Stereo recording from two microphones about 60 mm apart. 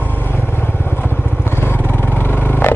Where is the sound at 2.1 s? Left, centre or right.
Left.